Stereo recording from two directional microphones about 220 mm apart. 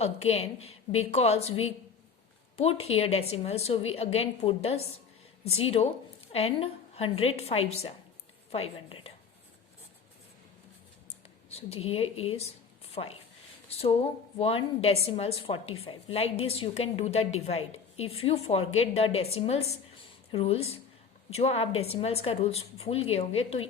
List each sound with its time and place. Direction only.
0.3 s a woman's voice: 30° left (ahead or behind)
2.6 s a woman's voice: 30° left (ahead or behind)
11.5 s a woman's voice: 25° left (ahead or behind)